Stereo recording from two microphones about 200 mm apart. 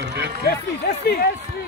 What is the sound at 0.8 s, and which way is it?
Speech, 50° left (ahead or behind).